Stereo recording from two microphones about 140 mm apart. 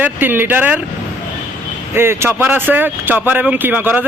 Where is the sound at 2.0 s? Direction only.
15° right (ahead or behind).